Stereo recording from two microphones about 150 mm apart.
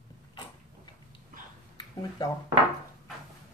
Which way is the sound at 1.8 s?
25° left (ahead or behind).